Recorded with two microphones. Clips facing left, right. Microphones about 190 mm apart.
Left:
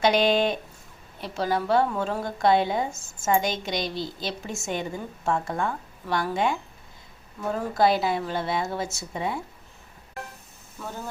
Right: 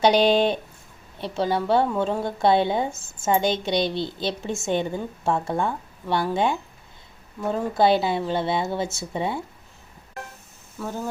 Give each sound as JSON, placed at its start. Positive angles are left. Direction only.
{"t": 0.0, "sound": "a woman's voice", "side_deg": -30}
{"t": 7.7, "sound": "a woman's voice", "side_deg": -25}
{"t": 10.8, "sound": "speech", "side_deg": -10}